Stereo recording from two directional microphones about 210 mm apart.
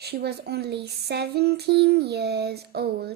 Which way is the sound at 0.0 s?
50° right (ahead or behind).